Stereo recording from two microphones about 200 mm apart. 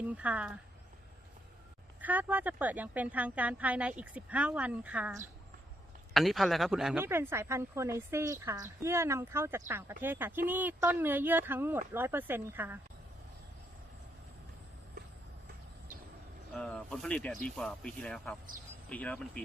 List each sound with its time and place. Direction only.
0.1 s speech: 5° right (ahead or behind)
2.0 s speech: 10° right (ahead or behind)
16.5 s speech: 5° left (ahead or behind)